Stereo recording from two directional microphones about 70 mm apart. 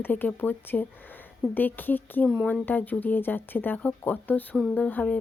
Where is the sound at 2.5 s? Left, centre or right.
Left.